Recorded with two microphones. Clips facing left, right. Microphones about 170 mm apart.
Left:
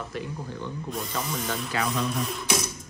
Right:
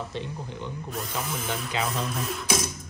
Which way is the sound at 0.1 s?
25° right (ahead or behind).